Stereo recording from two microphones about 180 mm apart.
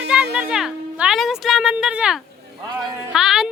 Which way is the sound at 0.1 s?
5° right (ahead or behind).